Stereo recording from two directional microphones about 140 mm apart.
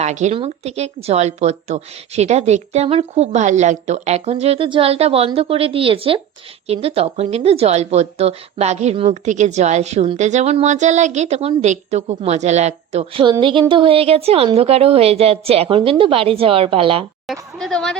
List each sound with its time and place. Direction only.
0.0 s a woman's voice: 55° right (ahead or behind)
13.4 s a woman's voice: 35° right (ahead or behind)
17.6 s speech: 5° left (ahead or behind)